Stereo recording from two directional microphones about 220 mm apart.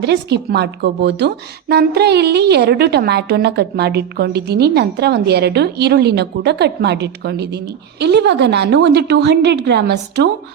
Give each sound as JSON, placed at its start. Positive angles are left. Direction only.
{"t": 0.0, "sound": "a woman's voice", "side_deg": -50}